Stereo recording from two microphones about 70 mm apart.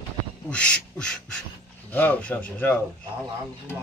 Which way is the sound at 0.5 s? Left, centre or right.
Centre.